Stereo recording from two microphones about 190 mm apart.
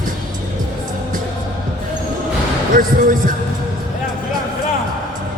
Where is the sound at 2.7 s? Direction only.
45° right (ahead or behind).